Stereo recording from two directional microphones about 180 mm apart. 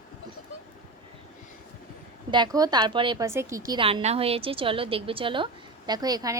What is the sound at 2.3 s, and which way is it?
Speech, 20° right (ahead or behind).